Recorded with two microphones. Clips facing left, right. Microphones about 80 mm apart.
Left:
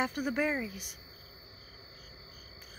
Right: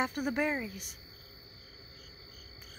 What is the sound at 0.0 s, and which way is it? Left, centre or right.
Speech, centre.